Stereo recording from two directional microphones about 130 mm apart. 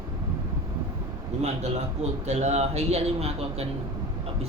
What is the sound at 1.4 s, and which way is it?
A man's voice, 55° right (ahead or behind).